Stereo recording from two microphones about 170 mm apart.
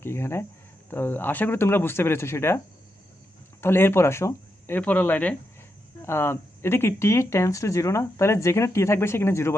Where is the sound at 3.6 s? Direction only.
15° left (ahead or behind).